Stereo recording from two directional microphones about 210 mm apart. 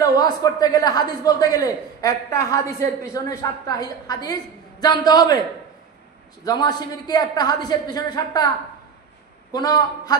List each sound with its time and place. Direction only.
0.0 s a woman's voice: 20° left (ahead or behind)
6.4 s a woman's voice: 20° left (ahead or behind)
9.5 s a woman's voice: 20° left (ahead or behind)